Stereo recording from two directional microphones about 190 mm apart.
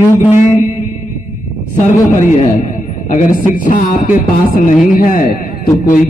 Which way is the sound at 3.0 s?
45° left (ahead or behind).